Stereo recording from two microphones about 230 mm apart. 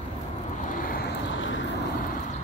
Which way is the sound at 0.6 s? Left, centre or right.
Left.